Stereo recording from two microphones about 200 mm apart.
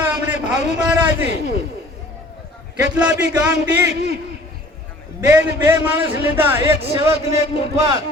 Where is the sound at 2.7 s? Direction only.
5° right (ahead or behind).